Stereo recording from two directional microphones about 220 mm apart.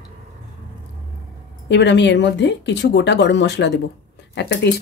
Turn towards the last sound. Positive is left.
turn(degrees=50)  # may be behind; listen again after turning